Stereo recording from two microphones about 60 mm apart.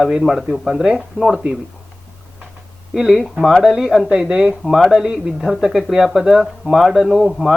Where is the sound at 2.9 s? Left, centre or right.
Centre.